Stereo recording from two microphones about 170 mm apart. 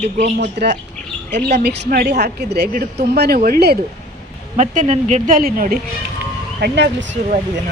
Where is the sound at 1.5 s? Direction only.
75° right (ahead or behind).